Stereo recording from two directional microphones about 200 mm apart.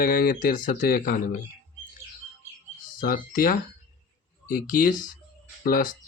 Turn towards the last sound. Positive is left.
turn(degrees=45)  # may be behind; listen again after turning